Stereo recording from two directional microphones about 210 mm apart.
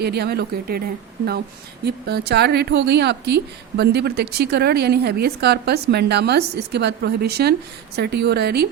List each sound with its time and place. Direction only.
0.0 s a woman's voice: 50° right (ahead or behind)